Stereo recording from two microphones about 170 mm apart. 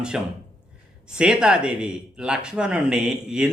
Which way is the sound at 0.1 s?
5° right (ahead or behind).